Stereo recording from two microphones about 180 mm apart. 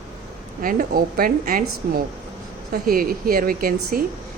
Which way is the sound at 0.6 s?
55° right (ahead or behind).